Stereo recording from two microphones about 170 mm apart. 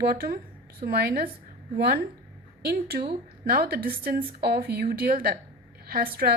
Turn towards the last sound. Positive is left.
turn(degrees=-60)  # may be behind; listen again after turning